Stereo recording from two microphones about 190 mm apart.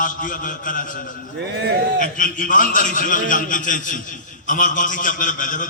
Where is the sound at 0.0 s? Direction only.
45° left (ahead or behind).